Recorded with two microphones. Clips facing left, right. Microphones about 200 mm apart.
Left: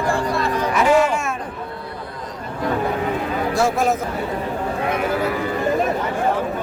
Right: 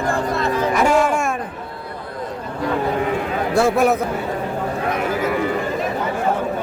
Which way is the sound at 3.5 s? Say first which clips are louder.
Right 4 dB; 60° right (ahead or behind).